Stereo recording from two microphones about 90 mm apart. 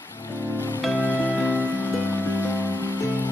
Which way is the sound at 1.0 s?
25° left (ahead or behind).